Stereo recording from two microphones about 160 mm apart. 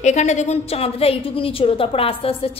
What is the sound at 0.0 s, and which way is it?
A woman's voice, 45° left (ahead or behind).